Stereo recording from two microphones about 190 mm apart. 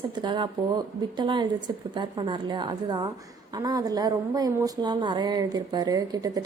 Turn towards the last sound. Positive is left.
turn(degrees=-20)  # may be behind; listen again after turning